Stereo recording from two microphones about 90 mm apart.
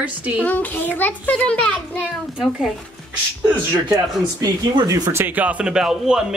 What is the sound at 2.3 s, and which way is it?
Speech, 10° right (ahead or behind).